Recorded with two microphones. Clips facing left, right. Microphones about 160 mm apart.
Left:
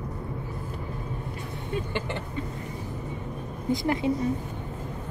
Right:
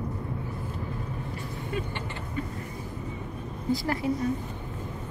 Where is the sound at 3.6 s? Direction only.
20° left (ahead or behind).